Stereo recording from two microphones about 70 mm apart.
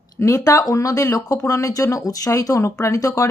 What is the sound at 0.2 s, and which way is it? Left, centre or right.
Speech, left.